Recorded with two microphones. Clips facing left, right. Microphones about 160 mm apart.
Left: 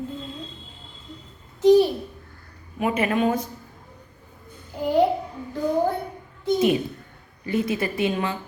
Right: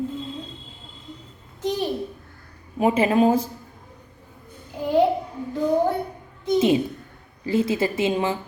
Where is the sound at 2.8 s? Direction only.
30° right (ahead or behind).